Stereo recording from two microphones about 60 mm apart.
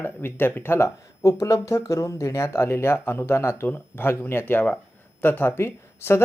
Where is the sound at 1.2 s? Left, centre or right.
Left.